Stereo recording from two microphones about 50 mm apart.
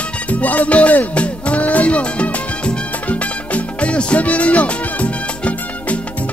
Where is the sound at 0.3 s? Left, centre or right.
Left.